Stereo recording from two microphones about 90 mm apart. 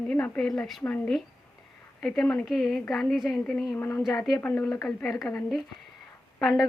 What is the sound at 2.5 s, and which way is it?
Speech, centre (ahead or behind).